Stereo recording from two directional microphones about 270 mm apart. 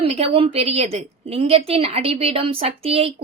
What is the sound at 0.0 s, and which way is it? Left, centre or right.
A woman's voice, right.